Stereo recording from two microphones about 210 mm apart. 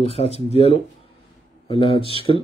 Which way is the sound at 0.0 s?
30° left (ahead or behind).